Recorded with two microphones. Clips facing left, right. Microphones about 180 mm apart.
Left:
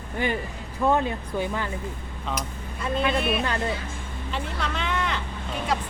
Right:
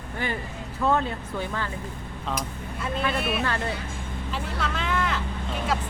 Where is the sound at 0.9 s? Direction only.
15° left (ahead or behind).